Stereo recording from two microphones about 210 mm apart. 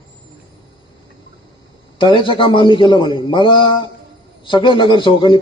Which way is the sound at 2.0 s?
25° left (ahead or behind).